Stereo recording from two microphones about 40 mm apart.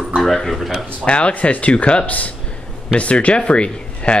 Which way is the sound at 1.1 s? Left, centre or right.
Left.